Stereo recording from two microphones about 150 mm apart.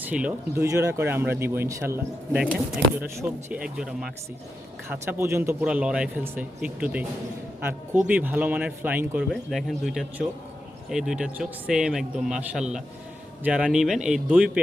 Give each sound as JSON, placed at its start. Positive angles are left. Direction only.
{"t": 0.0, "sound": "speech", "side_deg": -10}
{"t": 8.0, "sound": "speech", "side_deg": -10}
{"t": 9.3, "sound": "a man's voice", "side_deg": 0}